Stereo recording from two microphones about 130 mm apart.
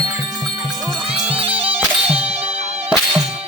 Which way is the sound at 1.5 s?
45° right (ahead or behind).